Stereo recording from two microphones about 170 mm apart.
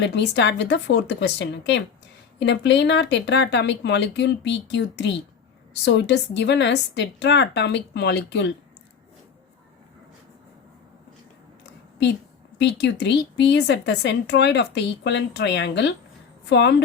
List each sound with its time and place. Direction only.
0.0 s a woman's voice: 85° left
12.5 s a woman's voice: 85° left